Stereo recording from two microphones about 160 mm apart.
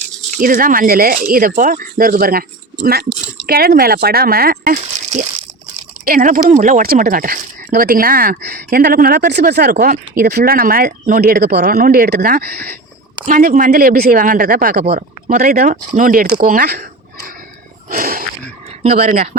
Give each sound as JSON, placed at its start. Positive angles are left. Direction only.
{"t": 0.3, "sound": "speech", "side_deg": -60}
{"t": 13.2, "sound": "speech", "side_deg": -55}
{"t": 17.8, "sound": "a sound", "side_deg": -60}
{"t": 18.8, "sound": "speech", "side_deg": -40}